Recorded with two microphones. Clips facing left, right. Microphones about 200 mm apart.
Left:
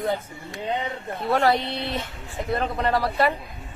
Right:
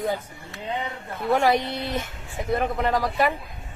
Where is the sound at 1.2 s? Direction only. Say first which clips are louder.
Right 1 dB; 20° right (ahead or behind).